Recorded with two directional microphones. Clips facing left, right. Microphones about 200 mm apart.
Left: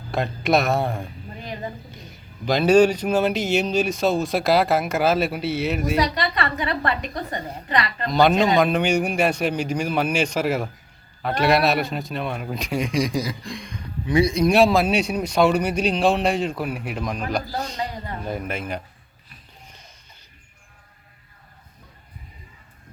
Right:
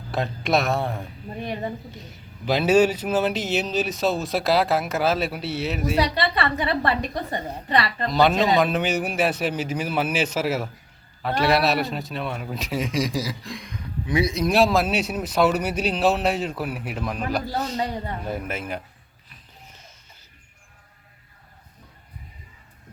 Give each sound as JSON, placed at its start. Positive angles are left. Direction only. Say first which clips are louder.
{"t": 0.1, "sound": "a man's voice", "louder": "left 2 dB", "side_deg": 0}
{"t": 6.1, "sound": "a woman's voice", "louder": "right 1 dB", "side_deg": -30}
{"t": 8.1, "sound": "a man's voice", "louder": "left 2 dB", "side_deg": 0}
{"t": 19.6, "sound": "music", "louder": "right 1 dB", "side_deg": -5}